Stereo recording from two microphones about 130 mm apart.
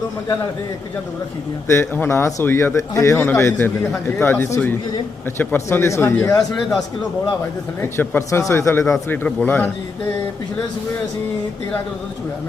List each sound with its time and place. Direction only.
1.6 s a man's voice: 20° left (ahead or behind)
6.5 s speech: centre (ahead or behind)
7.8 s a man's voice: 20° left (ahead or behind)